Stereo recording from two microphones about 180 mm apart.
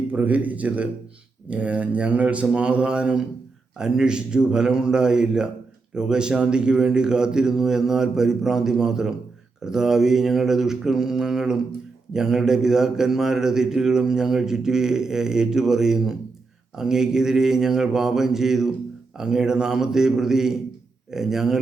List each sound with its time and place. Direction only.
0.1 s a man's voice: 10° right (ahead or behind)